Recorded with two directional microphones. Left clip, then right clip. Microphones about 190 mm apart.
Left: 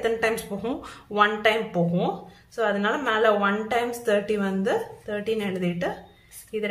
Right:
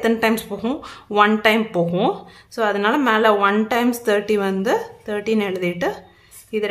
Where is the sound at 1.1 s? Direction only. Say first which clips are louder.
Right 5 dB; 35° right (ahead or behind).